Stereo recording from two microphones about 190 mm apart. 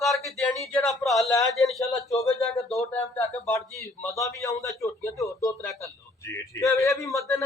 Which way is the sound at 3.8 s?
15° left (ahead or behind).